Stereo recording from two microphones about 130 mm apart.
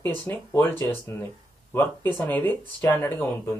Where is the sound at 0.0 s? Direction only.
15° left (ahead or behind).